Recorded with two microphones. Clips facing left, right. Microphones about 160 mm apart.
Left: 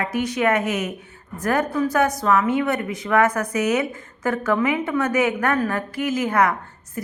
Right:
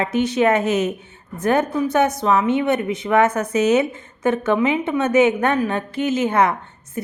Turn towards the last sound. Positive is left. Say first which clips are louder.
# right 2 dB
turn(degrees=-25)  # may be behind; listen again after turning